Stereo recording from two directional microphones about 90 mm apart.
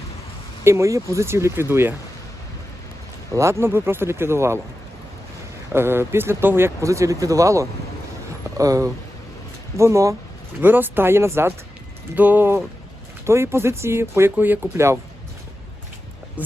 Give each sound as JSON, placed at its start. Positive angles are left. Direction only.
{"t": 0.6, "sound": "speech", "side_deg": -30}
{"t": 3.3, "sound": "speech", "side_deg": -30}
{"t": 5.7, "sound": "speech", "side_deg": -25}
{"t": 6.8, "sound": "speech", "side_deg": -35}
{"t": 10.6, "sound": "speech", "side_deg": -20}